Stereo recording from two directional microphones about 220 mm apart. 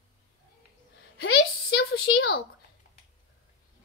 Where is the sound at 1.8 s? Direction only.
45° left (ahead or behind).